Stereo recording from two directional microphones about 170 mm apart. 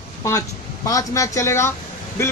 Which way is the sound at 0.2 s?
20° left (ahead or behind).